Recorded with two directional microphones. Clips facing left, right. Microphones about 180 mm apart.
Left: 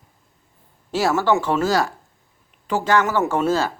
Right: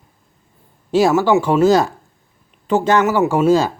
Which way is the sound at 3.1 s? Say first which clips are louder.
Right 6 dB; 10° right (ahead or behind).